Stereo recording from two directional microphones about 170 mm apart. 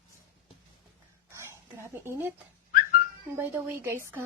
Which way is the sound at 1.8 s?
15° right (ahead or behind).